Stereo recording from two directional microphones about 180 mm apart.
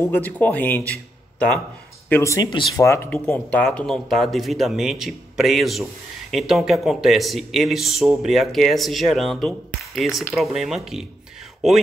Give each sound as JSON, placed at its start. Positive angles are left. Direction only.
{"t": 0.1, "sound": "speech", "side_deg": 10}
{"t": 2.0, "sound": "speech", "side_deg": 15}